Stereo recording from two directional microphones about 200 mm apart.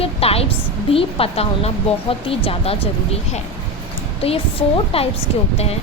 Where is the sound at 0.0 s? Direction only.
30° left (ahead or behind).